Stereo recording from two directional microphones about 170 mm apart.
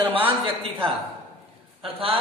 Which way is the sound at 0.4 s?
30° right (ahead or behind).